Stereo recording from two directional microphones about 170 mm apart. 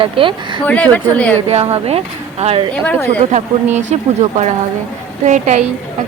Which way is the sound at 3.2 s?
45° right (ahead or behind).